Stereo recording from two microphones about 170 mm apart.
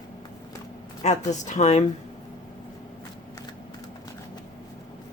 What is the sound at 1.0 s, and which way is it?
Speech, 45° left (ahead or behind).